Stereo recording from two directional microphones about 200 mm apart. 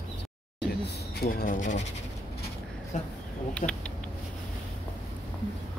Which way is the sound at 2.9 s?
35° left (ahead or behind).